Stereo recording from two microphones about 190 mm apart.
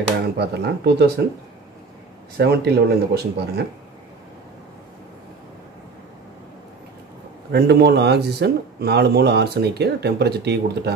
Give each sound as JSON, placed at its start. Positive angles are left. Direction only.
{"t": 0.4, "sound": "speech", "side_deg": -60}
{"t": 2.3, "sound": "speech", "side_deg": -60}
{"t": 7.5, "sound": "speech", "side_deg": -60}